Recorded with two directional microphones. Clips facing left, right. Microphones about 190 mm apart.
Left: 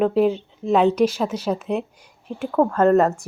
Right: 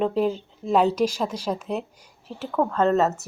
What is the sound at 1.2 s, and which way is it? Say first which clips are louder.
A woman's voice: left 4 dB; 5° left (ahead or behind).